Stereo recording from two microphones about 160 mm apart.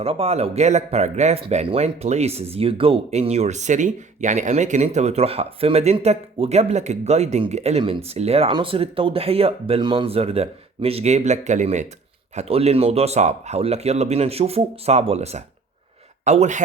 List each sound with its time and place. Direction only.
0.0 s speech: 40° right (ahead or behind)